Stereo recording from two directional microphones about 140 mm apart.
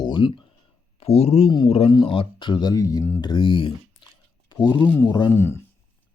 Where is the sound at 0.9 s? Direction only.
45° left (ahead or behind); by 3.2 s 20° left (ahead or behind).